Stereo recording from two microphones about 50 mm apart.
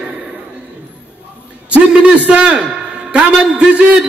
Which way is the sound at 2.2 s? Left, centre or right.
Right.